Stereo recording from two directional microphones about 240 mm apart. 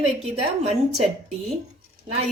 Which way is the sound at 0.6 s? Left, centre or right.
Right.